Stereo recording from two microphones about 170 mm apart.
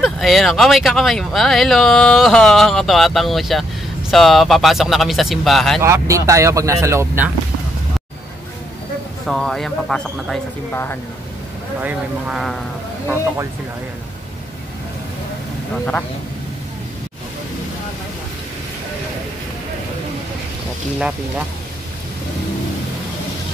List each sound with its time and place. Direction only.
0.0 s speech: centre (ahead or behind)
5.8 s speech: 15° right (ahead or behind)
9.3 s speech: centre (ahead or behind)
10.7 s speech: 10° left (ahead or behind)
11.8 s speech: 10° right (ahead or behind)